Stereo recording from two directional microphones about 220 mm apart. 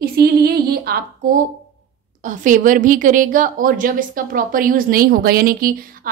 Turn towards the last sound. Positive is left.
turn(degrees=-40)  # may be behind; listen again after turning